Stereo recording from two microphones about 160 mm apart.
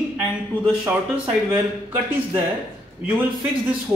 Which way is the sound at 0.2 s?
10° right (ahead or behind).